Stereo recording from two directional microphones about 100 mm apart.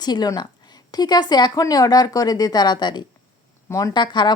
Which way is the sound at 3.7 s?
30° left (ahead or behind).